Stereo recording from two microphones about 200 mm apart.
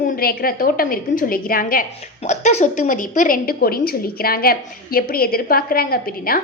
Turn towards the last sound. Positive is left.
turn(degrees=45)  # may be behind; listen again after turning